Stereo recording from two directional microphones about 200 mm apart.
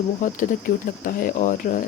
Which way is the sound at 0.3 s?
45° left (ahead or behind).